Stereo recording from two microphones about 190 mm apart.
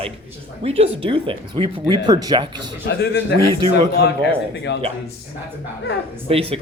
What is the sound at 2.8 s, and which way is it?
Speech, 60° left (ahead or behind).